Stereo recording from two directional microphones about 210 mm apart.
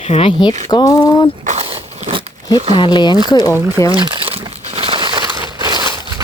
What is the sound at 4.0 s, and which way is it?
Crumpling, 25° right (ahead or behind).